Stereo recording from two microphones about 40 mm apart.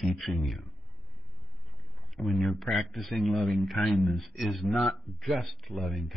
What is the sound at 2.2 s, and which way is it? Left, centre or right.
Speech, left.